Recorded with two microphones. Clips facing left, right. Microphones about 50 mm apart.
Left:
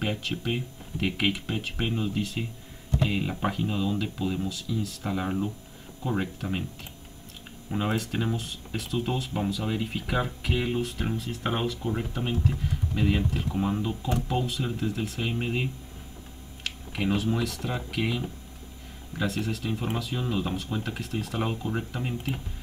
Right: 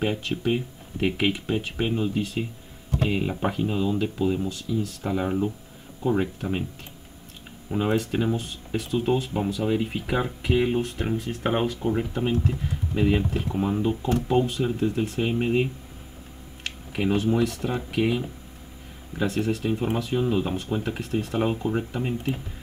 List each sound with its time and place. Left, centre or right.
0.0 s speech: centre
7.7 s speech: centre
16.6 s a sound: centre
17.3 s speech: centre
19.2 s speech: centre
19.6 s speech: centre